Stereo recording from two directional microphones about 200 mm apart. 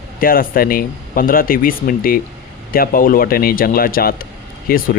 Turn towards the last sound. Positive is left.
turn(degrees=45)  # may be behind; listen again after turning